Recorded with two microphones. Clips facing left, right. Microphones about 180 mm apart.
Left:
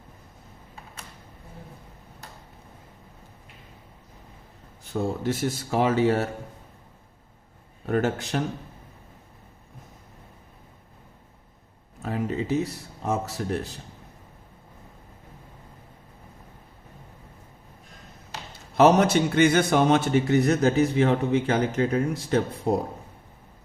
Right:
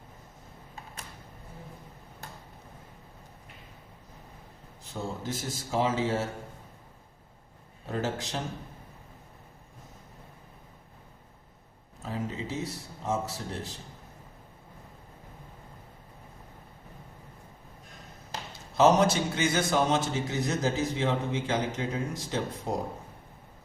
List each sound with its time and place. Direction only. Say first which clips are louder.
4.8 s a man's voice: left 8 dB; 65° left (ahead or behind)
7.9 s a man's voice: left 7 dB; 65° left (ahead or behind)
12.0 s a sound: left 7 dB; 65° left (ahead or behind)
18.8 s a man's voice: left 4 dB; 60° left (ahead or behind)